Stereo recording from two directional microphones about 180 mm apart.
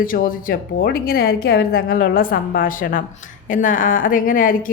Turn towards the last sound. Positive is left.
turn(degrees=50)  # may be behind; listen again after turning